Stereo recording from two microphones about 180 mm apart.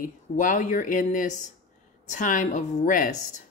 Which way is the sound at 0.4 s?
45° left (ahead or behind).